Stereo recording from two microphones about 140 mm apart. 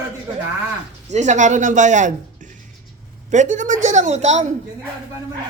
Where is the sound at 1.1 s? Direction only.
60° right (ahead or behind).